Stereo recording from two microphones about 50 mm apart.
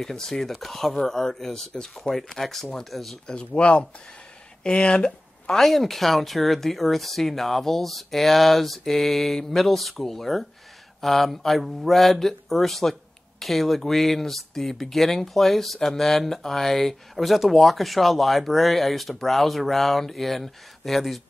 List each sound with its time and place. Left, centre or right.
0.0 s speech: centre
3.3 s speech: left
5.6 s speech: centre